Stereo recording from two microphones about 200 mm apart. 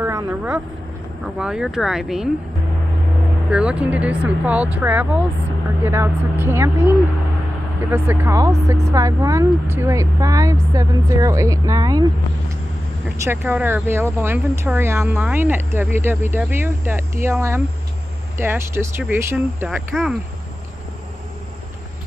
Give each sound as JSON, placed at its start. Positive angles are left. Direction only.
{"t": 0.0, "sound": "vehicle", "side_deg": -10}
{"t": 1.2, "sound": "speech", "side_deg": -5}
{"t": 3.4, "sound": "speech", "side_deg": -5}
{"t": 13.2, "sound": "speech", "side_deg": -10}